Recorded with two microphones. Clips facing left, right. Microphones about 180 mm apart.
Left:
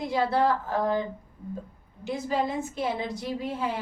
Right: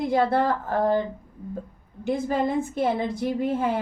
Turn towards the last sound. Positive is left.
turn(degrees=-50)  # may be behind; listen again after turning